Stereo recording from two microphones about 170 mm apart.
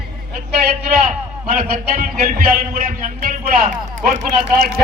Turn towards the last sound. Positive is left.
turn(degrees=-50)  # may be behind; listen again after turning